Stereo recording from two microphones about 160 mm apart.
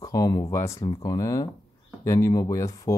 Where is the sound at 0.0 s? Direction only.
25° left (ahead or behind).